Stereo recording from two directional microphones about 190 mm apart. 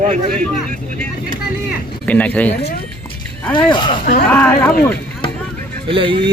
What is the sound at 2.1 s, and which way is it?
Speech, 5° left (ahead or behind).